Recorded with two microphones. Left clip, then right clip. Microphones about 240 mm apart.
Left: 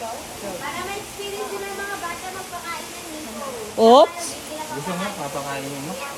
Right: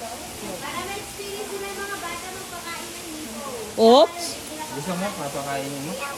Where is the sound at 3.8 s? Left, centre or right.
Centre.